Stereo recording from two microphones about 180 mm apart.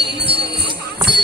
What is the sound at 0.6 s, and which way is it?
Music, 25° right (ahead or behind).